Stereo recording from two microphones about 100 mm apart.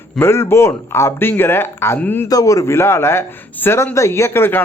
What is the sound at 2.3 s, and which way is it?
A man's voice, 35° left (ahead or behind).